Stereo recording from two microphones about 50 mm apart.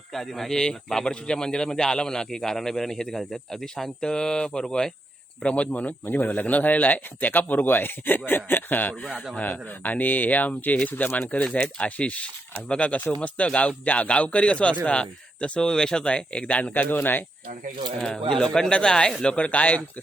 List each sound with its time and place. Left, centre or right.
0.1 s a man's voice: centre; by 17.2 s left
18.0 s a man's voice: centre; by 19.8 s left